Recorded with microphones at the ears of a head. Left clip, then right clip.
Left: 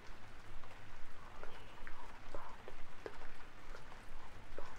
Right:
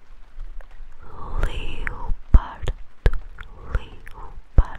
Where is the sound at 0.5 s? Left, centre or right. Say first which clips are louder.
Right 4 dB; right.